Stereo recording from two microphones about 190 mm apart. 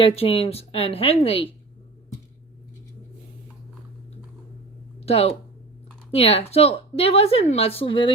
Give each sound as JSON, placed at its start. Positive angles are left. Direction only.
{"t": 0.0, "sound": "speech", "side_deg": 30}
{"t": 4.9, "sound": "a sound", "side_deg": 30}
{"t": 6.1, "sound": "speech", "side_deg": 30}